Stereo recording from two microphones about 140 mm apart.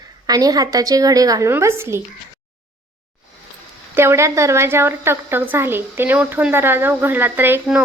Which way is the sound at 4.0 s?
20° right (ahead or behind).